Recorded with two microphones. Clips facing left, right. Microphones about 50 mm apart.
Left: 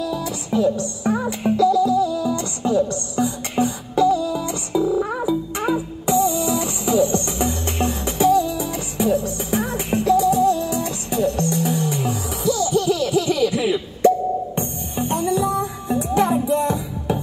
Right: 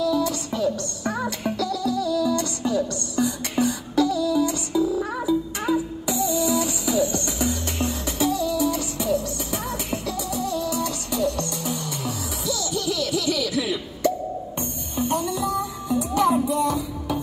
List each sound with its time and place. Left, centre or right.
0.0 s music: left